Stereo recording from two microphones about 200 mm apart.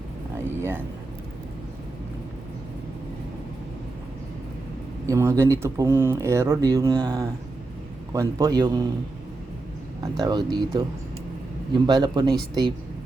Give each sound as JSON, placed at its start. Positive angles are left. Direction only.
{"t": 5.0, "sound": "speech", "side_deg": -15}
{"t": 10.0, "sound": "speech", "side_deg": -20}